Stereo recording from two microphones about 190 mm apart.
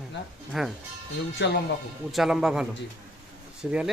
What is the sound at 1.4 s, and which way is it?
Speech, 65° left (ahead or behind).